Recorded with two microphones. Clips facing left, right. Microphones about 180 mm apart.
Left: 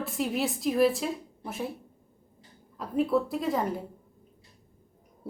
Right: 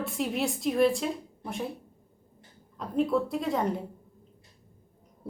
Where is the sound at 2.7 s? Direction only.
5° left (ahead or behind).